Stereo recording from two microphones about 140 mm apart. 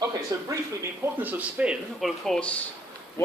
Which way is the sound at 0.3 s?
25° right (ahead or behind).